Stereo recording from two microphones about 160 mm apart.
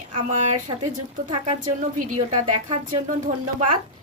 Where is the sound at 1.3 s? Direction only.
35° right (ahead or behind).